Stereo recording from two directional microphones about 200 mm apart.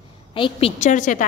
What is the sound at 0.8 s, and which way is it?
Speech, 40° left (ahead or behind).